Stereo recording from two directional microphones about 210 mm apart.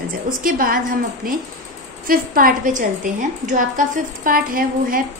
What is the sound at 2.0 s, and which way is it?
A woman's voice, 45° right (ahead or behind).